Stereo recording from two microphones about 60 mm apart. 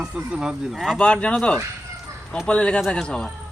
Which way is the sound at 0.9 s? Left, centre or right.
Centre.